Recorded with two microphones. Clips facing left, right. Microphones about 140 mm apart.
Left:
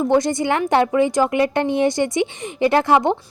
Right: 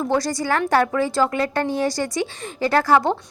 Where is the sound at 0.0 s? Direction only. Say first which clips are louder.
Left 4 dB; 20° left (ahead or behind).